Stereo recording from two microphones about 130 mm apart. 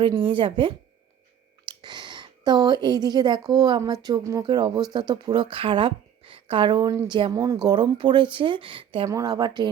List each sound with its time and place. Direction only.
0.0 s a woman's voice: 40° right (ahead or behind); by 7.1 s 25° right (ahead or behind)
7.1 s speech: 35° right (ahead or behind)
9.0 s speech: 25° right (ahead or behind)